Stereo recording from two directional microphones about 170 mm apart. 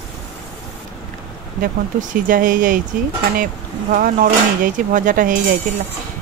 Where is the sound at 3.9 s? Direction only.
55° right (ahead or behind).